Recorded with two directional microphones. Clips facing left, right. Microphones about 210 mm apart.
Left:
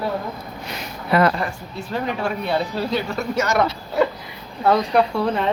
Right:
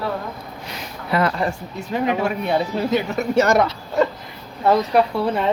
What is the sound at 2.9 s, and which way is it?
Speech, 20° right (ahead or behind).